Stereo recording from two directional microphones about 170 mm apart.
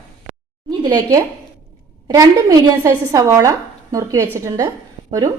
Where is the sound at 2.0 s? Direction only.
20° right (ahead or behind).